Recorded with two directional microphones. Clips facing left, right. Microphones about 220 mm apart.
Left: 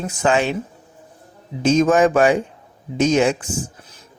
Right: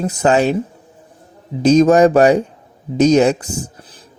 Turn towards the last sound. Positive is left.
turn(degrees=-35)  # may be behind; listen again after turning